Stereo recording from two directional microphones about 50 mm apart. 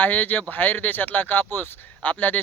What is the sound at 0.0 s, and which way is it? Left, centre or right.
Speech, left.